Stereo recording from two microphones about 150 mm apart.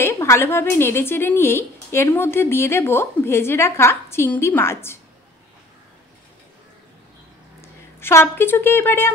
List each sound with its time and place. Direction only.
0.0 s a woman's voice: 15° left (ahead or behind)
7.6 s a woman's voice: 15° left (ahead or behind)